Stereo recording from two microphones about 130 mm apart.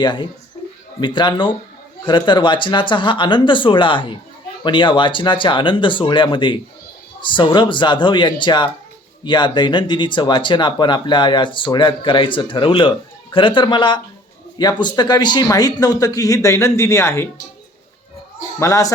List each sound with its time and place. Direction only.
0.0 s speech: 35° left (ahead or behind); by 17.2 s 20° left (ahead or behind)
18.6 s speech: 25° left (ahead or behind)